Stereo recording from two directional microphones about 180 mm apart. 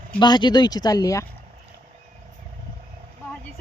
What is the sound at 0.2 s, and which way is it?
Speech, 25° left (ahead or behind).